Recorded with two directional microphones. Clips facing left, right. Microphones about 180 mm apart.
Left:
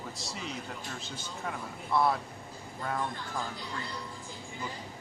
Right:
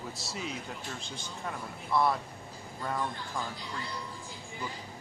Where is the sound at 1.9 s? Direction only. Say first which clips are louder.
Even; centre (ahead or behind).